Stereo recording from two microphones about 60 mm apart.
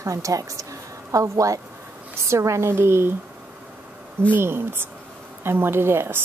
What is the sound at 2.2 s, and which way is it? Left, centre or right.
Speech, right.